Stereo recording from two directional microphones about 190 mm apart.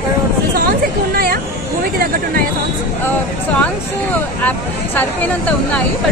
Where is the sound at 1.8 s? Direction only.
50° right (ahead or behind).